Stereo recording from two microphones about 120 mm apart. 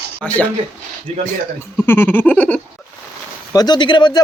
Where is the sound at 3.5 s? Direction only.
40° left (ahead or behind).